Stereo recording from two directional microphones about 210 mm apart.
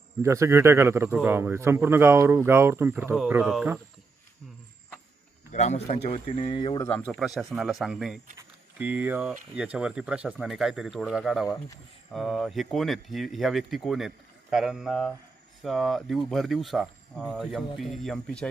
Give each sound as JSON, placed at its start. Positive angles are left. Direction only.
{"t": 0.2, "sound": "speech", "side_deg": -15}
{"t": 5.5, "sound": "speech", "side_deg": 35}
{"t": 7.1, "sound": "speech", "side_deg": 0}